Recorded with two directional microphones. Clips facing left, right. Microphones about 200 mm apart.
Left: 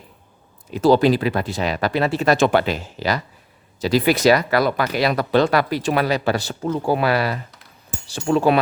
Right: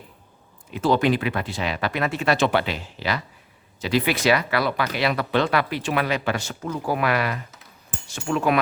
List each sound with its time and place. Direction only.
0.7 s speech: 35° left (ahead or behind)